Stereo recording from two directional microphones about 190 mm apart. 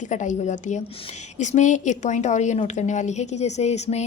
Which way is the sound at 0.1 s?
40° left (ahead or behind).